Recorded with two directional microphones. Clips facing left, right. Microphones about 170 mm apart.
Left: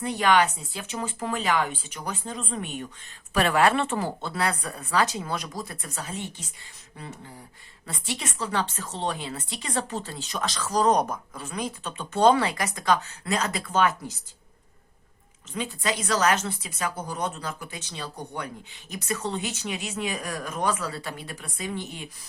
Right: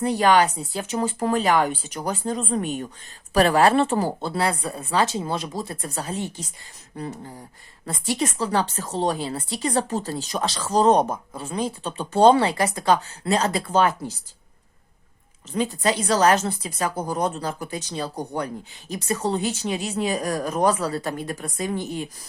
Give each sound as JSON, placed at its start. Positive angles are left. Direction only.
{"t": 0.0, "sound": "a woman's voice", "side_deg": -35}
{"t": 15.5, "sound": "a woman's voice", "side_deg": -35}